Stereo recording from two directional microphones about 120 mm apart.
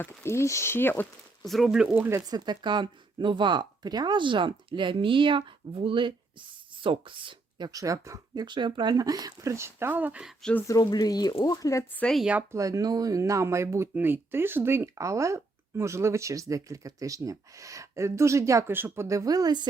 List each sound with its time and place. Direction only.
0.0 s speech: 20° left (ahead or behind)
1.5 s speech: centre (ahead or behind)
1.9 s speech: 20° right (ahead or behind)
2.3 s speech: 35° right (ahead or behind)
7.7 s speech: 30° right (ahead or behind)
8.4 s speech: 40° right (ahead or behind); by 10.3 s 10° right (ahead or behind)
10.7 s speech: 35° left (ahead or behind)
12.1 s speech: 10° right (ahead or behind)
12.5 s speech: 30° right (ahead or behind)